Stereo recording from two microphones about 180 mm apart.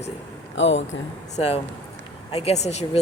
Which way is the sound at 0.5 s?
90° left.